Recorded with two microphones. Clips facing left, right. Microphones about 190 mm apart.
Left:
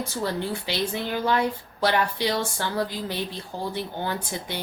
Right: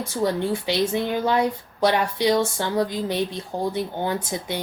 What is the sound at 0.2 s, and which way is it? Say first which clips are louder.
Speech: right 6 dB; 20° right (ahead or behind).